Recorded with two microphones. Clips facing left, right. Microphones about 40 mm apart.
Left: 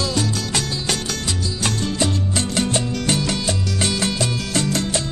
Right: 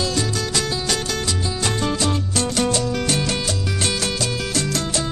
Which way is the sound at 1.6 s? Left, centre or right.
Left.